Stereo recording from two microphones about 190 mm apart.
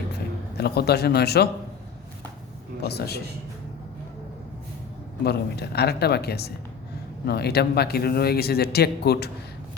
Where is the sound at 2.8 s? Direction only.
60° left (ahead or behind).